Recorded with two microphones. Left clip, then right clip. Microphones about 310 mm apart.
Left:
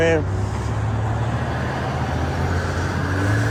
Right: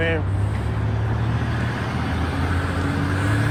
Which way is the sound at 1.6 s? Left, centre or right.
Left.